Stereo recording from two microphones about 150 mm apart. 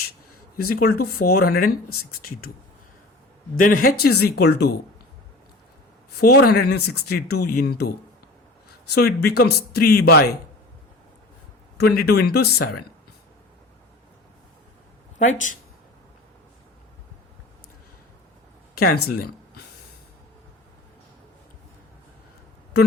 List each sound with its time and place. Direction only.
0.5 s speech: 85° left
3.6 s speech: 80° left
6.2 s speech: 90° left
11.8 s speech: 90° left
15.2 s speech: 55° left (ahead or behind)
18.8 s speech: 90° left